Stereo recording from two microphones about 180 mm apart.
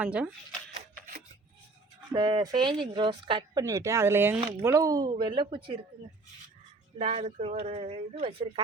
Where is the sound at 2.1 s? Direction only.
25° right (ahead or behind).